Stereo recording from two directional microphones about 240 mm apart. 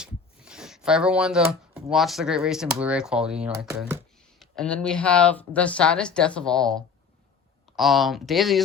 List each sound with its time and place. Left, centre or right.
0.0 s speech: centre
4.4 s speech: centre